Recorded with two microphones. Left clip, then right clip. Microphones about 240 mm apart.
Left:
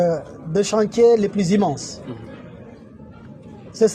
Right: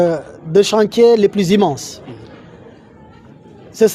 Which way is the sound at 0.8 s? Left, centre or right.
Right.